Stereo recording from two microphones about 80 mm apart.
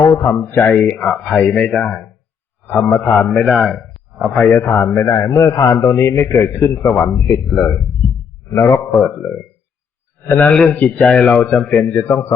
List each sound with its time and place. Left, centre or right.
0.2 s speech: left
0.8 s speech: centre
3.2 s speech: centre
3.4 s speech: centre
4.4 s speech: centre
4.6 s speech: left
4.9 s a man's voice: left
9.0 s speech: centre
10.5 s speech: centre
10.8 s speech: centre
11.7 s speech: left